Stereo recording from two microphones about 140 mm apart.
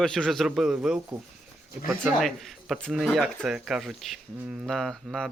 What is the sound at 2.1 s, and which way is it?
Speech, centre (ahead or behind).